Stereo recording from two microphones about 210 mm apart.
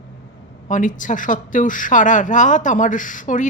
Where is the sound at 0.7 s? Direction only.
35° left (ahead or behind).